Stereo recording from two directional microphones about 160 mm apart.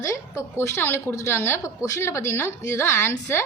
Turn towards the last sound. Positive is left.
turn(degrees=15)  # may be behind; listen again after turning